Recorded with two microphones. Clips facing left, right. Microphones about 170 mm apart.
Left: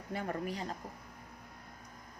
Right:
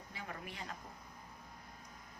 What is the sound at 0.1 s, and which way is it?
Speech, 50° left (ahead or behind).